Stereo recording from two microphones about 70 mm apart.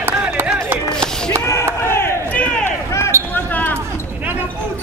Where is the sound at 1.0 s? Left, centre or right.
Centre.